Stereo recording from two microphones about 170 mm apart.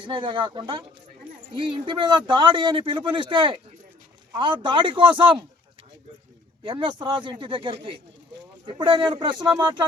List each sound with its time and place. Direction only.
0.0 s a man's voice: 30° right (ahead or behind)
6.7 s a man's voice: 30° right (ahead or behind)